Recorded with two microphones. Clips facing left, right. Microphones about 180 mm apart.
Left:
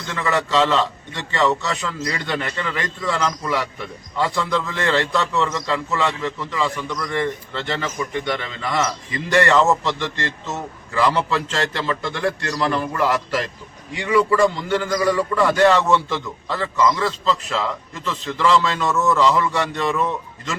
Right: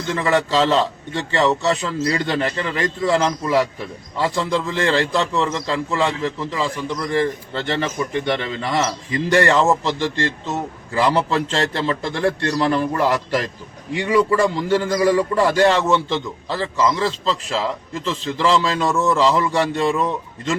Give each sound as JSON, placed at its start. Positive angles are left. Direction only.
{"t": 0.1, "sound": "a man's voice", "side_deg": -30}